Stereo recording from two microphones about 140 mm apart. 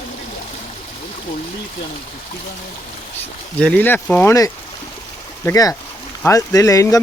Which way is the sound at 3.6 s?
10° left (ahead or behind).